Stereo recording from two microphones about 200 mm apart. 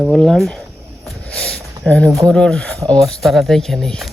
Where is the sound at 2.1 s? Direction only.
15° right (ahead or behind).